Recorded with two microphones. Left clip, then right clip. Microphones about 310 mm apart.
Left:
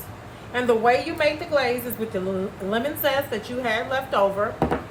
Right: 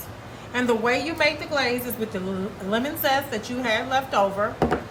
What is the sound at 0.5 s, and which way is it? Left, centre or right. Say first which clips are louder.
A woman's voice: left 3 dB; centre.